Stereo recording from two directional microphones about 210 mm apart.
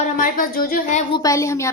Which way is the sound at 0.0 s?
40° left (ahead or behind).